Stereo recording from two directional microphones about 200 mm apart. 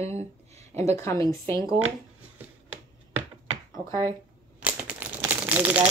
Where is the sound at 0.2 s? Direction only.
35° right (ahead or behind).